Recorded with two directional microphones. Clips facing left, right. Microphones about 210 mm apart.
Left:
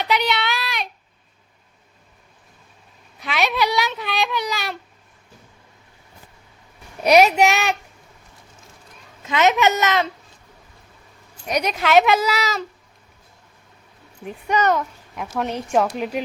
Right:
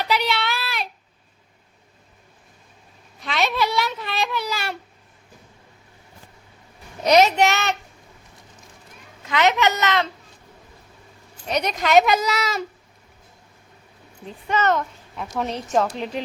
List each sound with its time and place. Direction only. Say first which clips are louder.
0.0 s child singing: left 1 dB; centre (ahead or behind)
3.2 s cat: left 1 dB; centre (ahead or behind)
7.0 s a child's voice: left 2 dB; 10° left (ahead or behind)
9.2 s a child's voice: left 2 dB; 15° left (ahead or behind)
11.4 s a child's voice: left 1 dB; 10° left (ahead or behind)
14.3 s a child's voice: left 2 dB; 15° left (ahead or behind)